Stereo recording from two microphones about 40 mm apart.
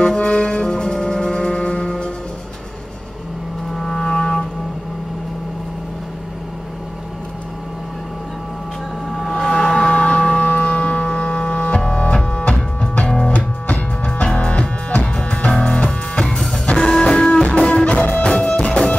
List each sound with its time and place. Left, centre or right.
0.0 s music: left
3.7 s music: centre
9.3 s a sound: centre
9.8 s a sound: left
11.7 s music: left
16.3 s music: centre; by 18.8 s left